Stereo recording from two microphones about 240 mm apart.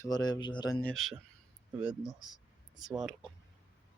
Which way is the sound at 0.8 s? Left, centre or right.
Centre.